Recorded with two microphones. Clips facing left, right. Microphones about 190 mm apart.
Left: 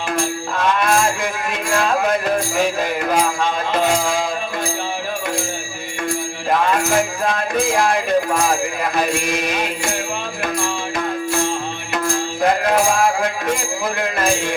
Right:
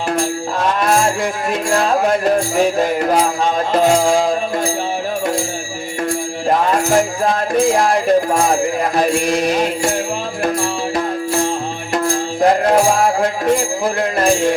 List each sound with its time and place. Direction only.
0.6 s music: 35° right (ahead or behind)
6.5 s music: 35° right (ahead or behind)
12.0 s music: 35° right (ahead or behind)